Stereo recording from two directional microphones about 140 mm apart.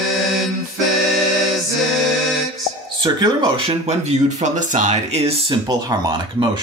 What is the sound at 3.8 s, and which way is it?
Speech, 50° right (ahead or behind).